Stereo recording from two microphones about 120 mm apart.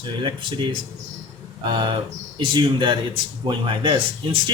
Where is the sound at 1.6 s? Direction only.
40° right (ahead or behind).